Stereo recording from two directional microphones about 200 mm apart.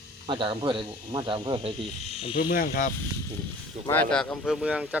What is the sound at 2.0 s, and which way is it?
Speech, 30° left (ahead or behind).